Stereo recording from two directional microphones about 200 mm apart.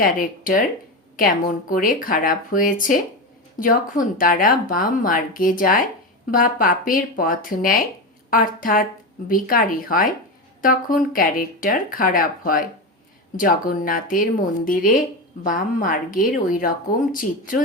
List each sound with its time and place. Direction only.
0.0 s speech: 45° left (ahead or behind)
1.7 s speech: 45° left (ahead or behind)